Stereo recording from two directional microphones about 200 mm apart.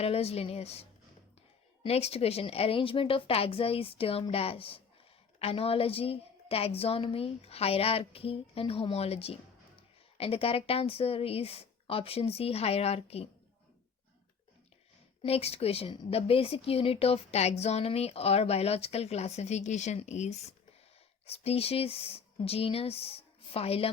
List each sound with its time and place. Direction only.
0.0 s a woman's voice: 30° left (ahead or behind)
15.2 s a woman's voice: 30° left (ahead or behind)